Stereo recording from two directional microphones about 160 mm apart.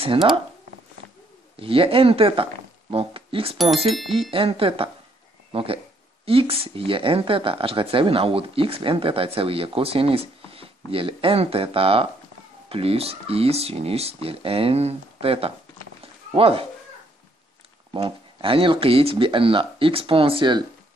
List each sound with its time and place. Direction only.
1.6 s speech: 35° right (ahead or behind)
16.0 s a sound: 35° right (ahead or behind)
17.9 s speech: 35° right (ahead or behind)